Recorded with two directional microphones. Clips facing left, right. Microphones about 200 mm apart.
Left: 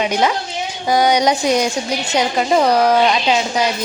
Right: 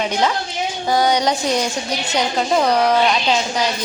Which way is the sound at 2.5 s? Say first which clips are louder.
Left 3 dB; 5° left (ahead or behind).